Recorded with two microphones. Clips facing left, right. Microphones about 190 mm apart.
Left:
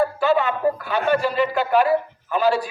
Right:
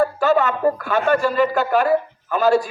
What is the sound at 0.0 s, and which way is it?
Speech, 45° right (ahead or behind).